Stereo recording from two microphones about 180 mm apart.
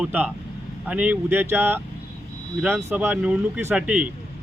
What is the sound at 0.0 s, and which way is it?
Speech, 10° right (ahead or behind).